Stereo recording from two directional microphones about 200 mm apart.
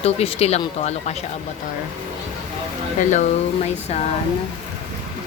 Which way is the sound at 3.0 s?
35° left (ahead or behind).